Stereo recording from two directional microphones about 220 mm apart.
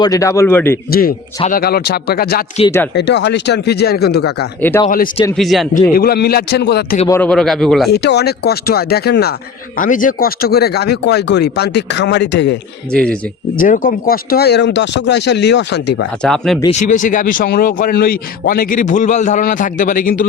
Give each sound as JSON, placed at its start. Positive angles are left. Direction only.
{"t": 0.0, "sound": "a man's voice", "side_deg": 15}
{"t": 0.9, "sound": "speech", "side_deg": 45}
{"t": 4.7, "sound": "a man's voice", "side_deg": 10}
{"t": 5.9, "sound": "speech", "side_deg": 45}
{"t": 7.1, "sound": "a man's voice", "side_deg": 5}
{"t": 7.9, "sound": "speech", "side_deg": 50}
{"t": 12.9, "sound": "a man's voice", "side_deg": 5}
{"t": 13.6, "sound": "speech", "side_deg": 40}
{"t": 16.2, "sound": "a man's voice", "side_deg": 5}
{"t": 16.7, "sound": "a man's voice", "side_deg": 35}